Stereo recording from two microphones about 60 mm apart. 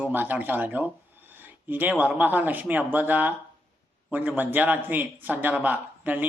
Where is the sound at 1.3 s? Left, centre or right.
Right.